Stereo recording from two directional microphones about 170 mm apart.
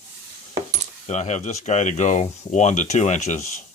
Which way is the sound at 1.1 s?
45° left (ahead or behind).